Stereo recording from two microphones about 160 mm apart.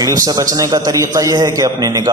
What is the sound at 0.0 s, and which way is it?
A man's voice, 25° right (ahead or behind).